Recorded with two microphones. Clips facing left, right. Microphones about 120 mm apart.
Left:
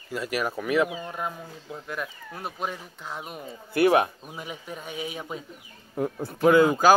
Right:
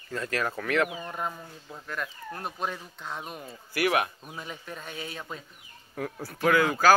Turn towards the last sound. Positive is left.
turn(degrees=20)  # may be behind; listen again after turning